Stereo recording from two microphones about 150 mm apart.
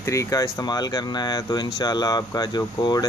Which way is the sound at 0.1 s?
20° left (ahead or behind).